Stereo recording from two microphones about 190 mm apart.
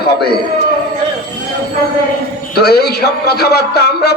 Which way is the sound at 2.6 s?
55° left (ahead or behind).